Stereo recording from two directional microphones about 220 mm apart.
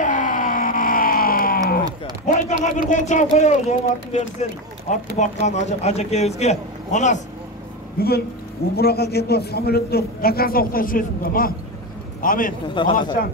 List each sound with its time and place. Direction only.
0.0 s a sound: 35° left (ahead or behind)
2.2 s speech: 35° left (ahead or behind)
8.0 s a man's voice: 45° left (ahead or behind)
12.6 s a man's voice: 20° left (ahead or behind)